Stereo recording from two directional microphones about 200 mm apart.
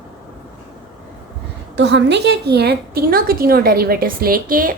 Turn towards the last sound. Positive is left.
turn(degrees=-45)  # may be behind; listen again after turning